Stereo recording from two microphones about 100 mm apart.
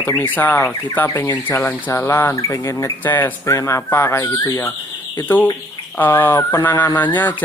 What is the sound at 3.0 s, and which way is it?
Speech, 20° left (ahead or behind).